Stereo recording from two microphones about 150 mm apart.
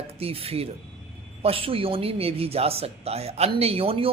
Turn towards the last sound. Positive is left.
turn(degrees=-40)  # may be behind; listen again after turning